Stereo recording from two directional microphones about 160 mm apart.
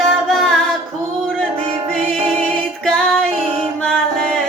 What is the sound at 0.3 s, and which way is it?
Music, centre (ahead or behind).